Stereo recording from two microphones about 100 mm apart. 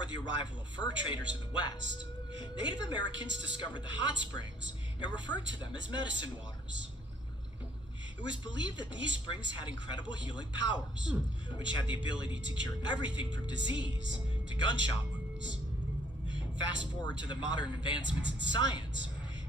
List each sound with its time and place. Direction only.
0.0 s speech: 50° left (ahead or behind)
8.3 s speech: 50° left (ahead or behind)
16.6 s speech: 50° left (ahead or behind)